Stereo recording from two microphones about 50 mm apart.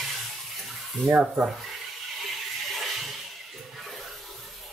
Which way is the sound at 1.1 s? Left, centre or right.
Right.